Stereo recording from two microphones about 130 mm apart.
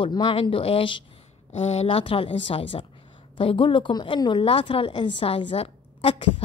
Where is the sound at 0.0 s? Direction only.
35° left (ahead or behind).